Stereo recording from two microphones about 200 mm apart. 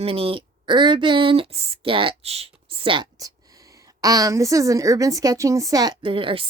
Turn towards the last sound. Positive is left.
turn(degrees=-25)  # may be behind; listen again after turning